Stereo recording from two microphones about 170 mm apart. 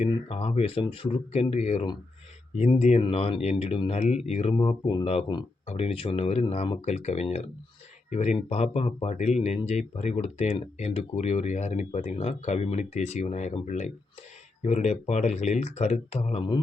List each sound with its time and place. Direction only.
0.1 s speech: 35° left (ahead or behind)
4.5 s speech: 25° left (ahead or behind)